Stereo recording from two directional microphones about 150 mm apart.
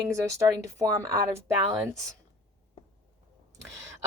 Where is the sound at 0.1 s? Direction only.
20° right (ahead or behind).